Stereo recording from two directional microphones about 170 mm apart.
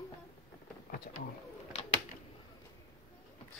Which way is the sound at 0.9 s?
60° left (ahead or behind).